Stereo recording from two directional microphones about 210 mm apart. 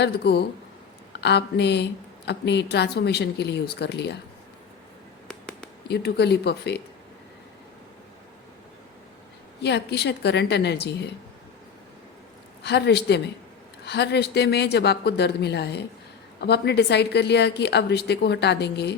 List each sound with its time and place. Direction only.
0.0 s speech: 50° left (ahead or behind)
5.9 s speech: 50° left (ahead or behind)
9.6 s speech: 55° left (ahead or behind)
12.6 s speech: 55° left (ahead or behind)